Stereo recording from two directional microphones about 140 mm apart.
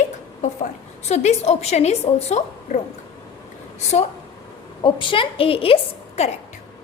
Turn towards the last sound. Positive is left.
turn(degrees=45)  # may be behind; listen again after turning